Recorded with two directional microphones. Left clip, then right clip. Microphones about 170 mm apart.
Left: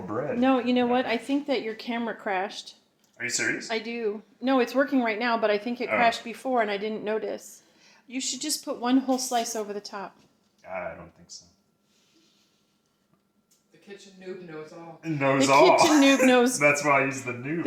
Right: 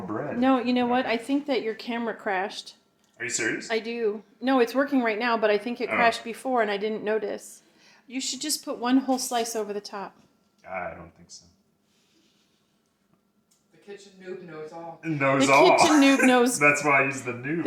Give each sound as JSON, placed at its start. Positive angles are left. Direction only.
{"t": 0.0, "sound": "a sound", "side_deg": 20}
{"t": 0.3, "sound": "a woman's voice", "side_deg": 0}
{"t": 3.2, "sound": "speech", "side_deg": 20}
{"t": 3.7, "sound": "a woman's voice", "side_deg": 0}
{"t": 14.6, "sound": "a woman's voice", "side_deg": 0}